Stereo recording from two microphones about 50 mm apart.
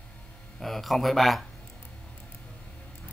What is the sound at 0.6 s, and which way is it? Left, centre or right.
Speech, centre.